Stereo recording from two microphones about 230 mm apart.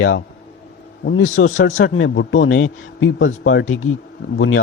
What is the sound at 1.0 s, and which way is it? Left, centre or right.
A man's voice, left.